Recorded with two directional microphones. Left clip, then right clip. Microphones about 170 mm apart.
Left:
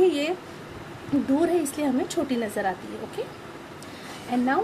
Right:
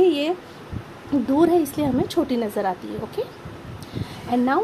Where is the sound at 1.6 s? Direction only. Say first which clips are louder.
Right 4 dB; 20° right (ahead or behind).